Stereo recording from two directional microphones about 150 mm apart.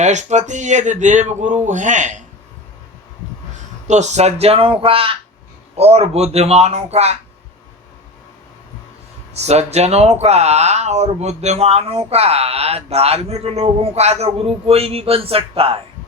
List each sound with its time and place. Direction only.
0.0 s speech: 50° right (ahead or behind)
3.8 s speech: 50° right (ahead or behind)
9.3 s speech: 45° right (ahead or behind)